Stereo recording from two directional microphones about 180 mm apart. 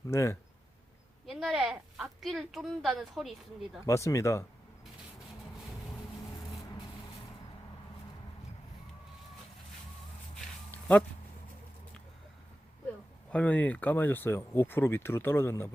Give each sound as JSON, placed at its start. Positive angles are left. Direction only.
{"t": 0.1, "sound": "speech", "side_deg": 15}
{"t": 1.3, "sound": "speech", "side_deg": 0}
{"t": 3.8, "sound": "speech", "side_deg": 15}
{"t": 10.3, "sound": "a sound", "side_deg": 10}
{"t": 13.3, "sound": "speech", "side_deg": 10}